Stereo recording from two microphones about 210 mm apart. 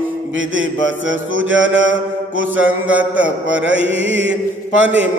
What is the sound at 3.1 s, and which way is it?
A man's voice, 65° right (ahead or behind).